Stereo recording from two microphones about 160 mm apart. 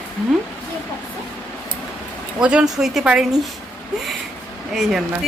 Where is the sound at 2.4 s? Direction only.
5° right (ahead or behind).